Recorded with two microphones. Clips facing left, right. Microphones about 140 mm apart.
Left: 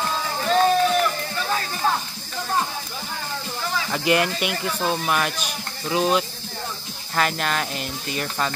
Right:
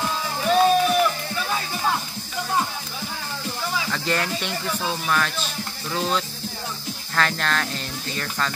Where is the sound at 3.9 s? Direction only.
15° left (ahead or behind).